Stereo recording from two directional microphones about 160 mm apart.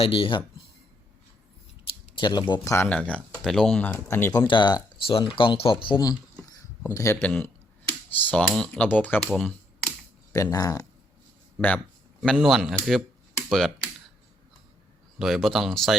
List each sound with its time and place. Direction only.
0.0 s speech: 35° left (ahead or behind)
2.1 s speech: 30° left (ahead or behind); by 4.3 s 10° left (ahead or behind)
4.4 s speech: 30° left (ahead or behind); by 9.3 s 10° left (ahead or behind)
9.3 s computer keyboard: centre (ahead or behind)
10.3 s speech: 20° left (ahead or behind)
12.2 s speech: centre (ahead or behind)
15.2 s speech: centre (ahead or behind)